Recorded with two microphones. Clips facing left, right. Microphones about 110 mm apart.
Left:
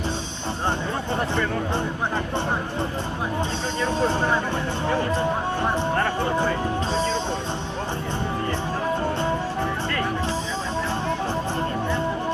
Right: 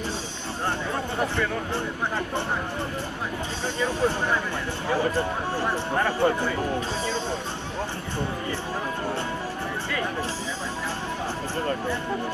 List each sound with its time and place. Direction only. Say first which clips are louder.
3.8 s speech: left 3 dB; 20° left (ahead or behind)